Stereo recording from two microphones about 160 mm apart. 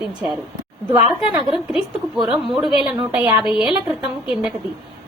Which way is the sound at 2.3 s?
5° right (ahead or behind).